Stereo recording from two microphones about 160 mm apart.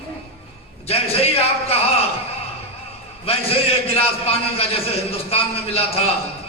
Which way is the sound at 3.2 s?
35° left (ahead or behind).